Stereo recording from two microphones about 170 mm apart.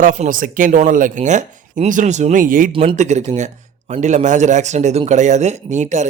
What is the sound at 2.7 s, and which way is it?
Speech, 30° right (ahead or behind).